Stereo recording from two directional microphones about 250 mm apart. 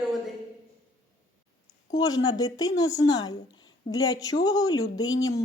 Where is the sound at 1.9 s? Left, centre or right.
Centre.